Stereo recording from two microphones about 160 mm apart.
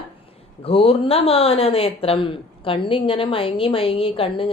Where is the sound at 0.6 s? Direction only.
35° left (ahead or behind).